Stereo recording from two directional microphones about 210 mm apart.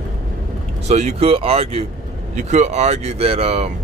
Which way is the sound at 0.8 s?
35° right (ahead or behind).